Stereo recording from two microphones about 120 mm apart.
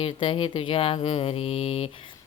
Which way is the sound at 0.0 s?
45° left (ahead or behind).